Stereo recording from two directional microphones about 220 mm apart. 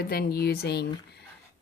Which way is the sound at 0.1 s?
45° left (ahead or behind).